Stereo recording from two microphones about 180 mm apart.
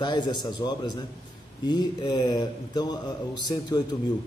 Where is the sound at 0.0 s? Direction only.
25° left (ahead or behind).